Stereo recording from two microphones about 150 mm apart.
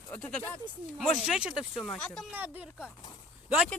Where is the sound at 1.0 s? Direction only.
5° right (ahead or behind).